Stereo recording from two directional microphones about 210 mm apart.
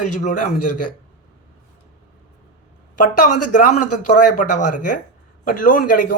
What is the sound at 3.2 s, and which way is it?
Speech, 40° left (ahead or behind).